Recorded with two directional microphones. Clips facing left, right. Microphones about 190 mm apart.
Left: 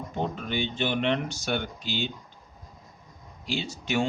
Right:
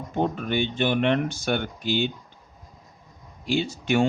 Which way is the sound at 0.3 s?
55° right (ahead or behind).